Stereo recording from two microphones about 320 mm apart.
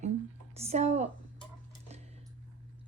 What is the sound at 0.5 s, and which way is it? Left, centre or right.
Speech, centre.